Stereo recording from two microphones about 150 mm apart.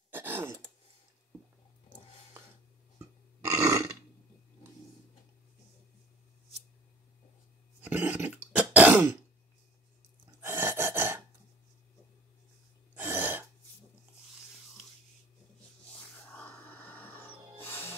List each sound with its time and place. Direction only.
0.1 s throat clearing: 15° right (ahead or behind)
3.4 s roar: 20° right (ahead or behind)
7.8 s throat clearing: 10° right (ahead or behind)
10.4 s gasp: 15° right (ahead or behind)
12.9 s throat clearing: 10° right (ahead or behind)
16.3 s music: 10° left (ahead or behind)